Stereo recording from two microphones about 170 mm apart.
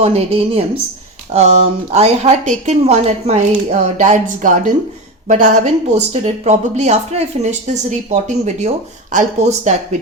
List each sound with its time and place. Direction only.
0.0 s speech: 35° right (ahead or behind)